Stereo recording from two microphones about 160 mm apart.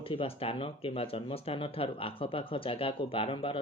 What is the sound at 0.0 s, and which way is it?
Speech, 35° left (ahead or behind).